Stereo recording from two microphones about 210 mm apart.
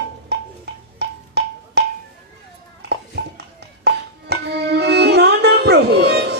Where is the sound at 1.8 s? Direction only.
50° right (ahead or behind).